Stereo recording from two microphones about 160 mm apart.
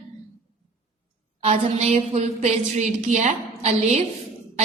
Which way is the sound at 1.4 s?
40° right (ahead or behind).